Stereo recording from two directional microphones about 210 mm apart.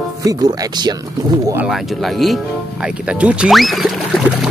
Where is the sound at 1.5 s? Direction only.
5° right (ahead or behind).